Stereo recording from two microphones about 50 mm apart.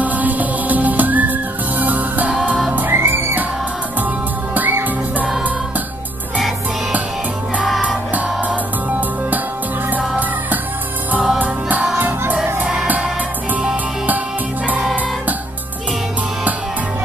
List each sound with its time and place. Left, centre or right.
0.0 s music: right
2.9 s music: right
8.1 s music: right
9.8 s music: right